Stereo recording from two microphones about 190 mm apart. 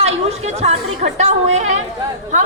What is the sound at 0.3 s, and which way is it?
A woman's voice, 35° right (ahead or behind).